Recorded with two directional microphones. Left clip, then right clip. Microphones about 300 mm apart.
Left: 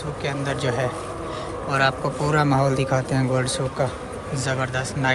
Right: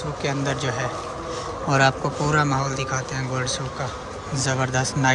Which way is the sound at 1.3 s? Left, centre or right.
Centre.